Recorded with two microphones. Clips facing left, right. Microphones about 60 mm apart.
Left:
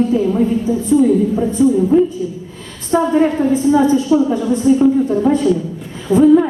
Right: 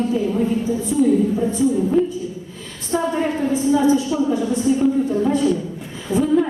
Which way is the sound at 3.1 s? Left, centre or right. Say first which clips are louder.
Left 8 dB; left.